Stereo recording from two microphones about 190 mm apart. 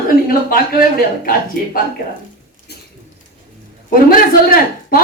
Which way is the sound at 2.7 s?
60° left (ahead or behind).